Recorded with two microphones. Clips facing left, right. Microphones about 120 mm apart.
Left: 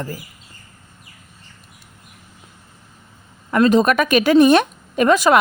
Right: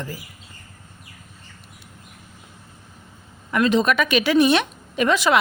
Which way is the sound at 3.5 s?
40° left (ahead or behind).